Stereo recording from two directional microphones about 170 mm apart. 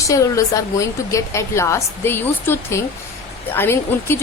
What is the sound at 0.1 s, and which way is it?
A woman's voice, 20° left (ahead or behind).